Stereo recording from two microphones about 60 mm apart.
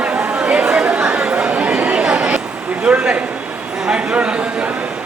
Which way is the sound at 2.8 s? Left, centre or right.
Right.